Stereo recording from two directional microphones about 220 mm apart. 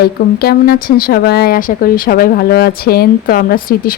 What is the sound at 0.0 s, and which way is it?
Speech, 45° left (ahead or behind).